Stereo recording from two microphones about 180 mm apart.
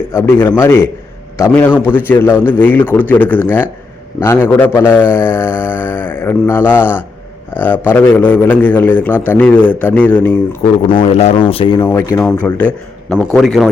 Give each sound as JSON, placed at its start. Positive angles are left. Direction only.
{"t": 0.1, "sound": "a man's voice", "side_deg": 15}
{"t": 10.8, "sound": "speech", "side_deg": 30}
{"t": 11.9, "sound": "a man's voice", "side_deg": 15}